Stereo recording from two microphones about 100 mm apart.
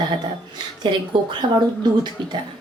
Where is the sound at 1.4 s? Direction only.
50° right (ahead or behind).